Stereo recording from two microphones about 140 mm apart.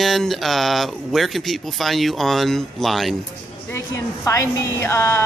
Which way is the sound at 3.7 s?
20° left (ahead or behind).